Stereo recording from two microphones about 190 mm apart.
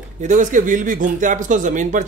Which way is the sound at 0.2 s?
40° right (ahead or behind).